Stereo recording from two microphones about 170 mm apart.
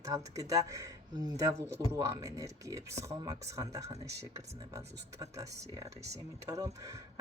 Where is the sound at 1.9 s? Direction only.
15° right (ahead or behind).